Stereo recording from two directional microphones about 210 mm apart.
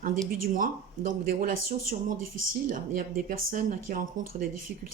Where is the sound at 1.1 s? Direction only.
40° right (ahead or behind).